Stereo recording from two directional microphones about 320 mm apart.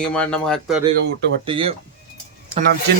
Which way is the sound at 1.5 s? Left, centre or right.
Centre.